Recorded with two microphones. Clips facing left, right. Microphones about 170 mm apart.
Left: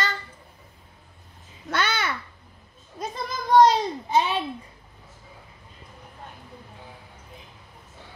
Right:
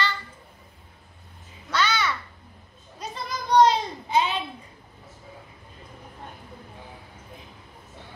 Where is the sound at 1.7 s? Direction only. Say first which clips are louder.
Right 1 dB; 50° left (ahead or behind).